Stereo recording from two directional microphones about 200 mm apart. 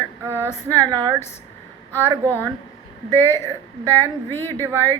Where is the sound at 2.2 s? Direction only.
15° right (ahead or behind).